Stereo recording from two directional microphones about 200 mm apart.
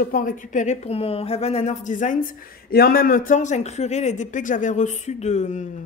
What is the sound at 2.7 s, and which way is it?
Speech, 50° left (ahead or behind).